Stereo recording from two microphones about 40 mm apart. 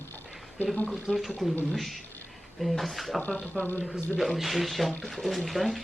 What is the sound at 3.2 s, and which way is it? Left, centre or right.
Speech, left.